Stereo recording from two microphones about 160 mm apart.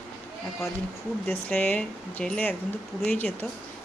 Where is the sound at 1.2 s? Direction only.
10° left (ahead or behind).